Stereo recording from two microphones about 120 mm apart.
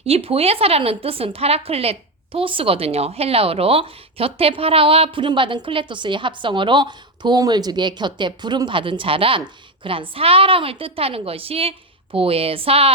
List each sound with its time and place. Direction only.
0.0 s a woman's voice: 55° right (ahead or behind)